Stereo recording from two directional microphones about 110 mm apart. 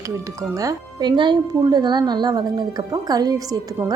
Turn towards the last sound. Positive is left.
turn(degrees=-35)  # may be behind; listen again after turning